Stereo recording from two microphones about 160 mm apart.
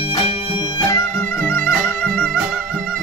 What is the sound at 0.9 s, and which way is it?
Music, 15° left (ahead or behind).